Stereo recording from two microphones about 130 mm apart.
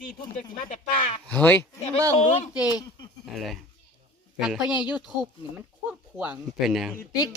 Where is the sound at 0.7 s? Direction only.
65° left (ahead or behind).